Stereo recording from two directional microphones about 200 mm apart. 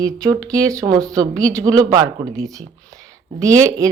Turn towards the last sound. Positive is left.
turn(degrees=-15)  # may be behind; listen again after turning